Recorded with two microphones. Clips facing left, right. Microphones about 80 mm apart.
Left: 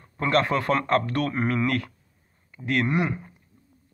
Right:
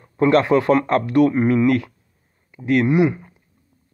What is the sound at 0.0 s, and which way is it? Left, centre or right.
A man's voice, right.